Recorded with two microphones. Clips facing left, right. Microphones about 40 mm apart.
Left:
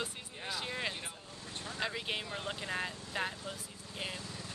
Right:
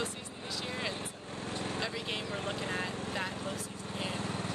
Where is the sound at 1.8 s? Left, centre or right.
Left.